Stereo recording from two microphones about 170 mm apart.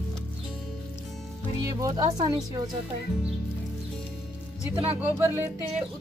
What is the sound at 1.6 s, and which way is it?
Speech, 20° right (ahead or behind).